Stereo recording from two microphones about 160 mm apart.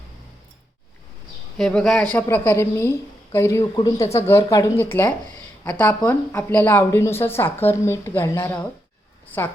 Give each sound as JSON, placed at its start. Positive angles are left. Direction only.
{"t": 1.5, "sound": "a woman's voice", "side_deg": 5}